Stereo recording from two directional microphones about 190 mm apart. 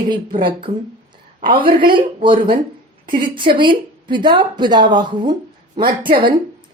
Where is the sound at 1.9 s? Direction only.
25° right (ahead or behind).